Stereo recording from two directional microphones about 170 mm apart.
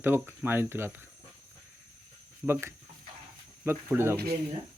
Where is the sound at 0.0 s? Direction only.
15° right (ahead or behind).